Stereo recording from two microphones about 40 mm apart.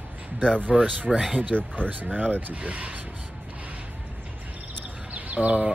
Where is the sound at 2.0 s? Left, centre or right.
Right.